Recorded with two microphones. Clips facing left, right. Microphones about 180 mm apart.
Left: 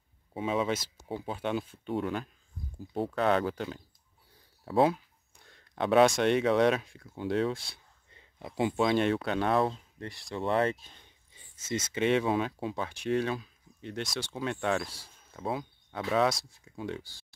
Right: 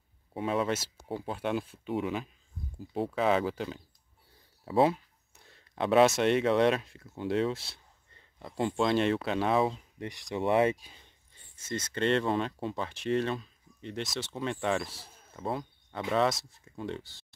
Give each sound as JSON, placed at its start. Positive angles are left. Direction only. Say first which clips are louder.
{"t": 0.3, "sound": "speech", "louder": "even", "side_deg": 0}
{"t": 8.1, "sound": "a sound", "louder": "left 2 dB", "side_deg": 15}
{"t": 8.5, "sound": "speech", "louder": "left 1 dB", "side_deg": 5}
{"t": 9.9, "sound": "speech", "louder": "right 3 dB", "side_deg": -15}
{"t": 11.5, "sound": "speech", "louder": "left 2 dB", "side_deg": 90}
{"t": 11.9, "sound": "speech", "louder": "left 1 dB", "side_deg": 5}